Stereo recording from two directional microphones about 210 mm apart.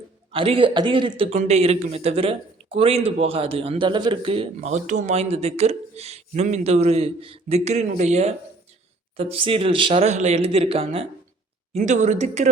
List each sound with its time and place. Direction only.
0.3 s a man's voice: 25° right (ahead or behind)